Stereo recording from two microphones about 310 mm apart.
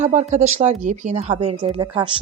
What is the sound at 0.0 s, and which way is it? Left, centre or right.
A woman's voice, right.